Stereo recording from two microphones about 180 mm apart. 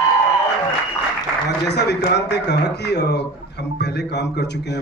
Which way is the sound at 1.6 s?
70° left (ahead or behind).